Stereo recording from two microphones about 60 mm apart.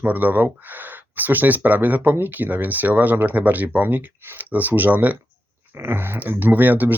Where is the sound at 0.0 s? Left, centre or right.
Right.